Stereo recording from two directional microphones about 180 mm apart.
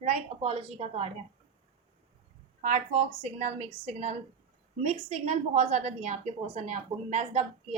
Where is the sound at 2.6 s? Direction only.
40° right (ahead or behind).